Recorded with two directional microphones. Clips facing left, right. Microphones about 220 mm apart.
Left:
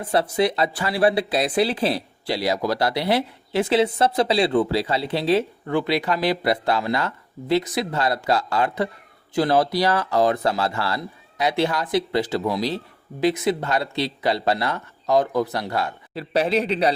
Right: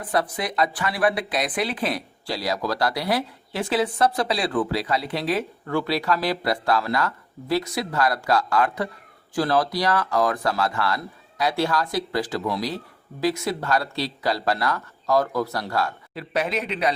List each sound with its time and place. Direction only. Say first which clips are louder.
0.0 s speech: left 5 dB; 30° left (ahead or behind)